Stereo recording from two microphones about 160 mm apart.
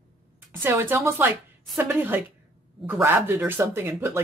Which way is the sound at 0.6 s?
15° right (ahead or behind).